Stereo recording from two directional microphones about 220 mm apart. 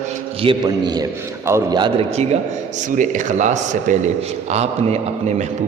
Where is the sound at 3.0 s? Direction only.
35° right (ahead or behind).